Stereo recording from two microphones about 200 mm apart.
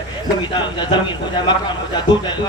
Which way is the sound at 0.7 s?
25° left (ahead or behind).